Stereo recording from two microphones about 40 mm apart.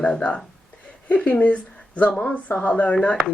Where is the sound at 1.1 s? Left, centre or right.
Left.